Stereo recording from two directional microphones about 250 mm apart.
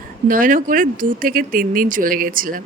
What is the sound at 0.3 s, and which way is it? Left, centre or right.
Speech, right.